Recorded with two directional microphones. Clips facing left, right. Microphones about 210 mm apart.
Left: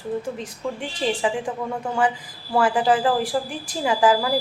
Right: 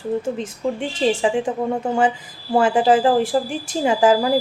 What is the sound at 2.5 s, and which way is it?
A woman's voice, 25° right (ahead or behind).